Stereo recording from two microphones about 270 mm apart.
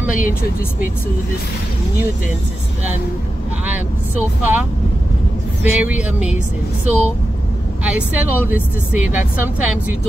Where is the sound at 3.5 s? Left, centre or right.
Centre.